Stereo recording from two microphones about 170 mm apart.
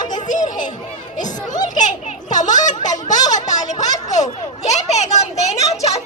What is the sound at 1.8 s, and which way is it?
A child's voice, 45° left (ahead or behind).